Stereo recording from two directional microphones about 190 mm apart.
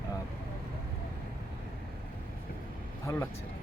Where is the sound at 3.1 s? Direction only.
15° left (ahead or behind).